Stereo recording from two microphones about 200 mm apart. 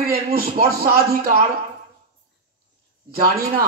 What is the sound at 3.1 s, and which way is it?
Speech, 50° right (ahead or behind).